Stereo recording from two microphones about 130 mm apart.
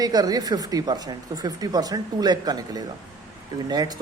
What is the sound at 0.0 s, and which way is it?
Speech, 30° right (ahead or behind).